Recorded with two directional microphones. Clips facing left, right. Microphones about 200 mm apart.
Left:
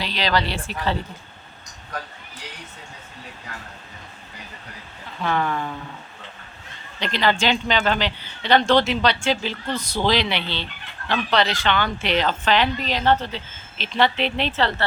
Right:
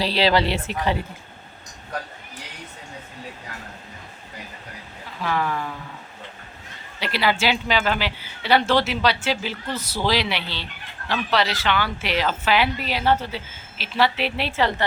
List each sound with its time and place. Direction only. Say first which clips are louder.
0.0 s a woman's voice: right 4 dB; 30° right (ahead or behind)
5.2 s speech: left 1 dB; 5° right (ahead or behind)
7.0 s a woman's voice: left 1 dB; 10° right (ahead or behind)